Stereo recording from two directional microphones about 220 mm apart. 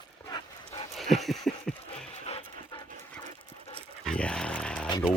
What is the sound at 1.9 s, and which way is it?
Music, 30° left (ahead or behind).